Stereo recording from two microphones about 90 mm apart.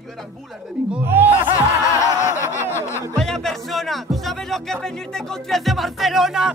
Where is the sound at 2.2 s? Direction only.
30° left (ahead or behind).